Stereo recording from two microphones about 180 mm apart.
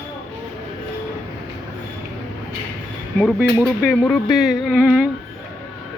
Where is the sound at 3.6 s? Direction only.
Centre (ahead or behind).